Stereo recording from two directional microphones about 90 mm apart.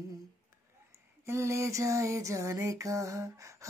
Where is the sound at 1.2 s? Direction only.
30° right (ahead or behind).